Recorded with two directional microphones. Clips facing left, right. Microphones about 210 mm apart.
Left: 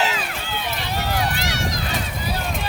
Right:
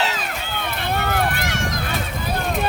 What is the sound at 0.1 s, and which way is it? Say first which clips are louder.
Run: even; 45° right (ahead or behind).